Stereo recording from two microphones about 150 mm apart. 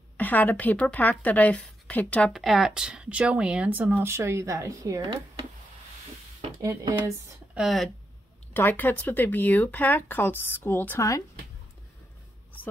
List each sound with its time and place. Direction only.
0.2 s speech: 10° left (ahead or behind); by 5.5 s 25° right (ahead or behind)
6.6 s speech: 20° right (ahead or behind)
7.5 s speech: centre (ahead or behind)
8.5 s speech: 15° left (ahead or behind)